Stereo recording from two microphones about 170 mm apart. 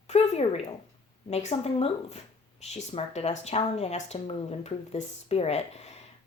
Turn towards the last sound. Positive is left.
turn(degrees=40)  # may be behind; listen again after turning